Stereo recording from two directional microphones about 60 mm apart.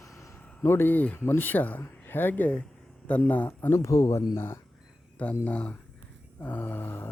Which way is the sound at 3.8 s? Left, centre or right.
Left.